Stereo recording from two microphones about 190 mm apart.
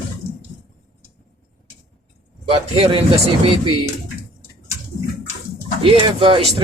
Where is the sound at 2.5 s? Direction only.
30° right (ahead or behind).